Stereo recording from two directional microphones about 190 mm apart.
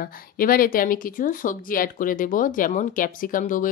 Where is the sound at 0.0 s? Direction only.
50° left (ahead or behind).